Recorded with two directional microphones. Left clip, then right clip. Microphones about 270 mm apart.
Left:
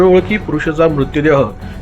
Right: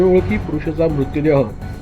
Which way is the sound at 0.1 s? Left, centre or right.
Left.